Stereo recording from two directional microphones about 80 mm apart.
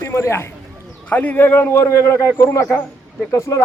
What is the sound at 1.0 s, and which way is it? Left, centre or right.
Speech, left.